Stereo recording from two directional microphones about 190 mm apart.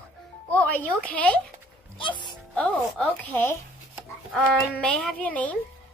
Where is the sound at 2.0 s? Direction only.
25° left (ahead or behind).